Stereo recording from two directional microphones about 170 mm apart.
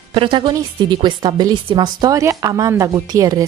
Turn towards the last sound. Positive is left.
turn(degrees=-20)  # may be behind; listen again after turning